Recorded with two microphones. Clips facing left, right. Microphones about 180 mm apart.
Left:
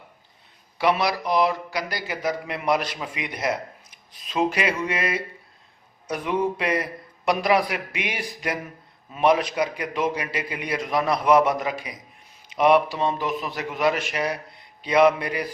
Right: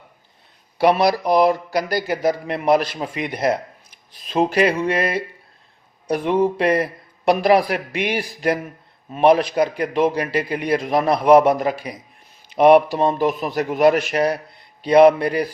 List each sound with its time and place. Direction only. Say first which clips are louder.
0.8 s a man's voice: right 6 dB; 40° right (ahead or behind)
9.6 s a man's voice: right 7 dB; 40° right (ahead or behind)
12.6 s a man's voice: right 6 dB; 50° right (ahead or behind)